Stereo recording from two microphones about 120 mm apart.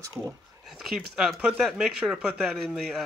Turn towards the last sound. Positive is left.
turn(degrees=0)  # may be behind; listen again after turning